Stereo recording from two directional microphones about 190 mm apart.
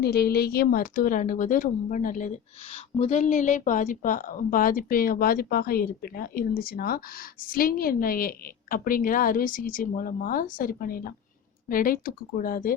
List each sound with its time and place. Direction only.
0.0 s a woman's voice: 55° left (ahead or behind)